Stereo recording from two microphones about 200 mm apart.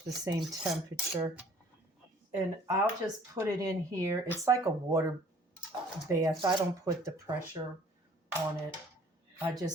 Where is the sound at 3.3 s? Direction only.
15° right (ahead or behind).